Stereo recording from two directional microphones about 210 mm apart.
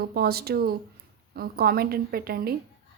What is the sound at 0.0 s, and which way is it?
Speech, 45° right (ahead or behind).